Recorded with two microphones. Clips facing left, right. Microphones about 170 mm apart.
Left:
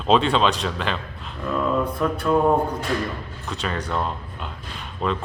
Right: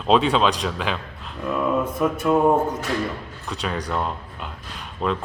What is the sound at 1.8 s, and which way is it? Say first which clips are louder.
Mantra: right 1 dB; 20° right (ahead or behind).